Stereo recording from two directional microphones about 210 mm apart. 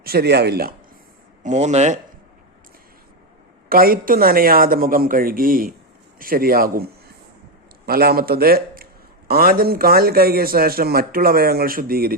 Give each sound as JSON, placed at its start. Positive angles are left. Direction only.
{"t": 0.0, "sound": "a man's voice", "side_deg": -50}
{"t": 1.5, "sound": "speech", "side_deg": -35}
{"t": 3.7, "sound": "a man's voice", "side_deg": -45}